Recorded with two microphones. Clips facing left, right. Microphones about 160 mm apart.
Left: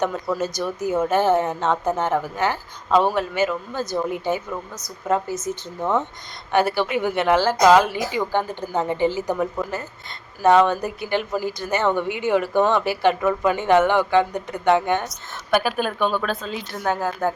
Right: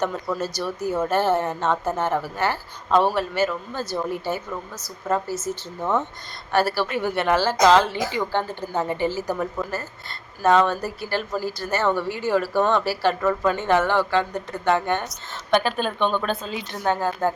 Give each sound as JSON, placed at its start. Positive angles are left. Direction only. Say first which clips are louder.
{"t": 0.1, "sound": "speech", "louder": "left 2 dB", "side_deg": 10}